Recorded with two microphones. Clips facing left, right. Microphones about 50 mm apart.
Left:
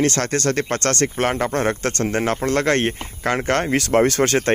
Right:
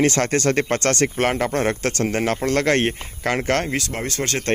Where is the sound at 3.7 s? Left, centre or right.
Left.